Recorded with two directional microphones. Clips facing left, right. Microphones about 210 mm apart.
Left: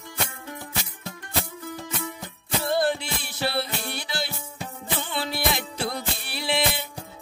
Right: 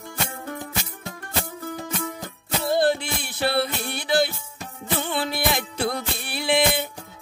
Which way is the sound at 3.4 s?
55° right (ahead or behind).